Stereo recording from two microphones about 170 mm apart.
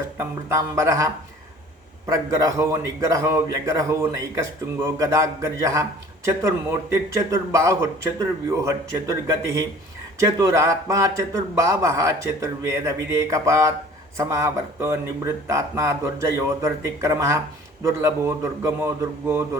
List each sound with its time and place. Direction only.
0.2 s a man's voice: 15° right (ahead or behind)